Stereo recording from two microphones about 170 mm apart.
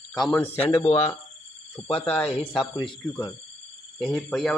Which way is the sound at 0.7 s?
35° left (ahead or behind).